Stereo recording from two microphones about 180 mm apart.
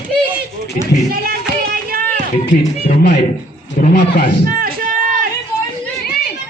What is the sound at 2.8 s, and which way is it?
Speech, 60° left (ahead or behind).